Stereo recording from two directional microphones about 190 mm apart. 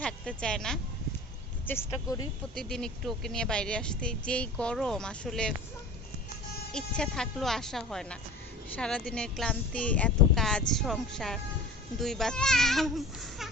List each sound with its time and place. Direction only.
0.0 s speech: 5° left (ahead or behind)
1.6 s speech: 15° left (ahead or behind)
2.6 s speech: 5° left (ahead or behind)
6.7 s speech: 5° left (ahead or behind)